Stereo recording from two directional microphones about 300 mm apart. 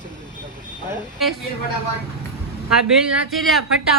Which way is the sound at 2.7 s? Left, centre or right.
Centre.